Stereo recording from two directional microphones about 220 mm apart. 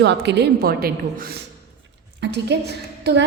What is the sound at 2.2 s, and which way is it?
Speech, 50° right (ahead or behind).